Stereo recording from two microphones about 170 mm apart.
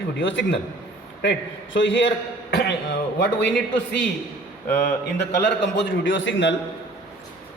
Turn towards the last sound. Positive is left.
turn(degrees=90)